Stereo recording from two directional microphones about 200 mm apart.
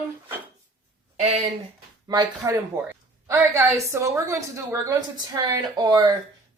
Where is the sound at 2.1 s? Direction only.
20° right (ahead or behind).